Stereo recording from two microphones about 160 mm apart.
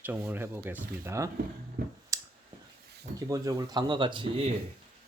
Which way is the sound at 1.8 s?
80° right.